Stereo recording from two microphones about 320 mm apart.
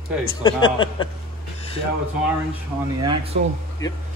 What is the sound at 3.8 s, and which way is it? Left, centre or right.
Speech, centre.